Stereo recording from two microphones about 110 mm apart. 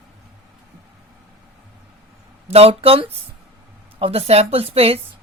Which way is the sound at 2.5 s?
65° right (ahead or behind).